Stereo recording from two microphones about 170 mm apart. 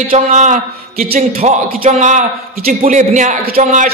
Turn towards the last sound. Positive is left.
turn(degrees=-45)  # may be behind; listen again after turning